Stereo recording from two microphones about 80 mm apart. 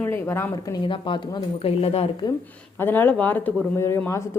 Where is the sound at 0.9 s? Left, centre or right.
Left.